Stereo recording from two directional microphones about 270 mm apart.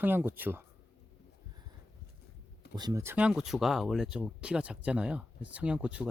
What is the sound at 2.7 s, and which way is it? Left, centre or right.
Speech, centre.